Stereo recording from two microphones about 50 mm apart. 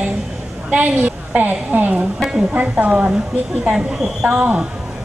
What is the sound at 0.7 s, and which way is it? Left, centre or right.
A woman's voice, right.